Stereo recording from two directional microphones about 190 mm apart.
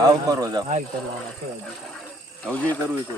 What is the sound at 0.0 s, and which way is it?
Speech, 20° right (ahead or behind).